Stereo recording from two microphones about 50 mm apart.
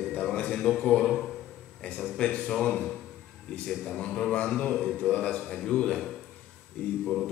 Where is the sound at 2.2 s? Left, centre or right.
Left.